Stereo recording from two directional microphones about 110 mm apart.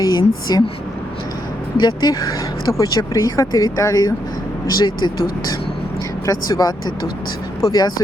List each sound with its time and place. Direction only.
0.0 s speech: 40° left (ahead or behind)
1.8 s speech: 40° left (ahead or behind)